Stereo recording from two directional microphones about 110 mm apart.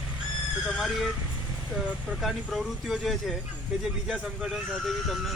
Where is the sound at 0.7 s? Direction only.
5° right (ahead or behind).